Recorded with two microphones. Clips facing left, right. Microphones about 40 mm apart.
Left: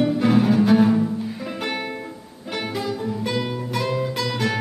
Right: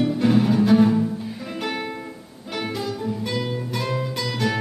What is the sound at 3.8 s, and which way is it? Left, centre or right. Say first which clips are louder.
Music: left 3 dB; centre.